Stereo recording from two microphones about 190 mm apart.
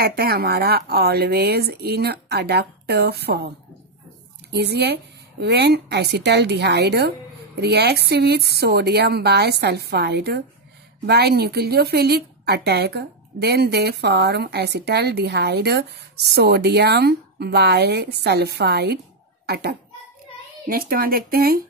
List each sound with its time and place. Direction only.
0.0 s a woman's voice: 55° right (ahead or behind)
4.5 s a woman's voice: 60° right (ahead or behind)